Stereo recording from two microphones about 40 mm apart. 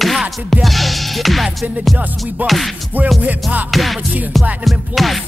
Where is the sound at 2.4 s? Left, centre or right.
Right.